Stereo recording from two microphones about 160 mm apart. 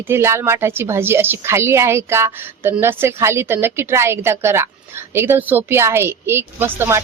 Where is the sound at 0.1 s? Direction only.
15° right (ahead or behind).